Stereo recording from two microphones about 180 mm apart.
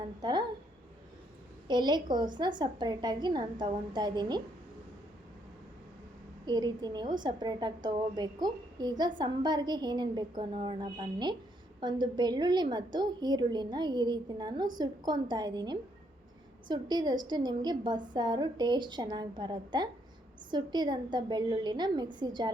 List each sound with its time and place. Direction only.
0.2 s a woman's voice: 25° right (ahead or behind)
1.6 s a woman's voice: 25° right (ahead or behind)
6.4 s a woman's voice: 25° right (ahead or behind)